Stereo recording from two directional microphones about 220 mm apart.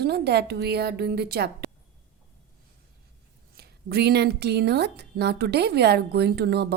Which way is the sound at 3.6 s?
45° right (ahead or behind).